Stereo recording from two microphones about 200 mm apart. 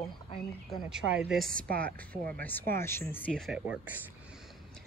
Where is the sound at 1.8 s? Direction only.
5° left (ahead or behind).